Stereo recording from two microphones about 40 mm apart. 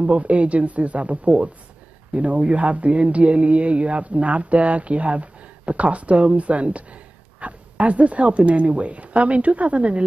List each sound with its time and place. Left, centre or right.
0.0 s speech: right